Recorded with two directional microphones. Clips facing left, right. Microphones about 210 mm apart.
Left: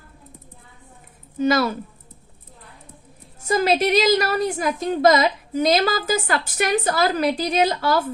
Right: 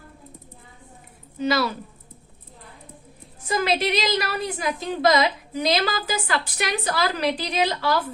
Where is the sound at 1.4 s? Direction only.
50° left (ahead or behind).